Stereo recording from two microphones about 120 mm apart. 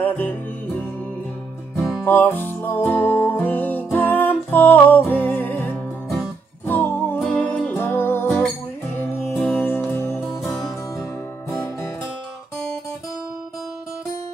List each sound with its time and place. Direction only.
0.0 s music: 15° left (ahead or behind)
1.8 s music: centre (ahead or behind)
2.0 s music: 15° left (ahead or behind)
10.2 s music: 5° right (ahead or behind)